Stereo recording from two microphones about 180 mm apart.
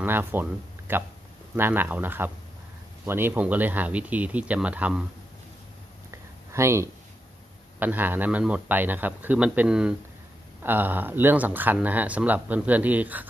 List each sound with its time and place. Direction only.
0.0 s speech: 10° right (ahead or behind)
6.5 s speech: 15° right (ahead or behind)